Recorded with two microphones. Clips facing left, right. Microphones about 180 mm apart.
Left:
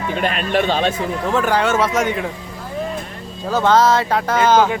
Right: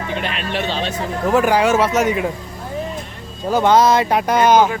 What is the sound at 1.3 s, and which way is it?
Speech, 10° right (ahead or behind).